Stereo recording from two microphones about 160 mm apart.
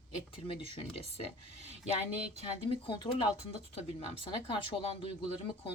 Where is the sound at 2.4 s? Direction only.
30° left (ahead or behind).